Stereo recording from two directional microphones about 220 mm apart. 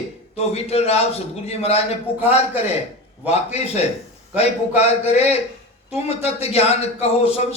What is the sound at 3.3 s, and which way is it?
A man's voice, 30° left (ahead or behind).